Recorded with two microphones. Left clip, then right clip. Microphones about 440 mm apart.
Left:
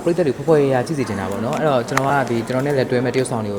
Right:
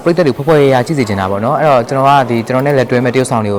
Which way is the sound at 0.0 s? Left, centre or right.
Right.